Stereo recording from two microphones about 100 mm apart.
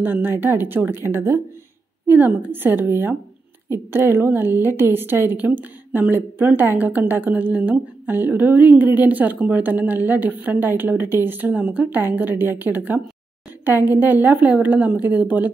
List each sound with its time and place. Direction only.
0.0 s a woman's voice: 20° right (ahead or behind)